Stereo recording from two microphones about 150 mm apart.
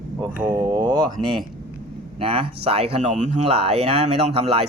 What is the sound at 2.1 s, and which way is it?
Speech, 40° right (ahead or behind).